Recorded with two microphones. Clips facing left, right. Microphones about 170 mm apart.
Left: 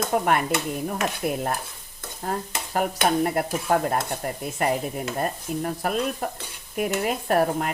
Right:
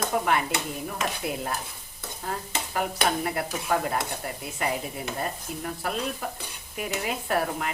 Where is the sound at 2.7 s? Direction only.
45° left (ahead or behind).